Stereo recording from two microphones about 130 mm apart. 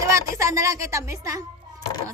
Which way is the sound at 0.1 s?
25° right (ahead or behind).